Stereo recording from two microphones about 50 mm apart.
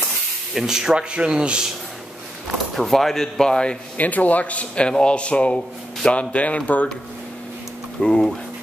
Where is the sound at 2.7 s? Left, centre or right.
Centre.